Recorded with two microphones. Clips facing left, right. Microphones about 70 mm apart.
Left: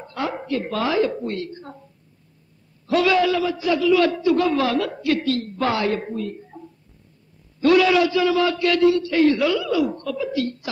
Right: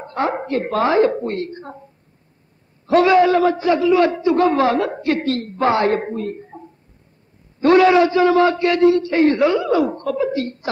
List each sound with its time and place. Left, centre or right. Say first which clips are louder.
0.0 s a man's voice: right 6 dB; right
2.9 s a man's voice: right 5 dB; right
7.6 s a man's voice: right 4 dB; right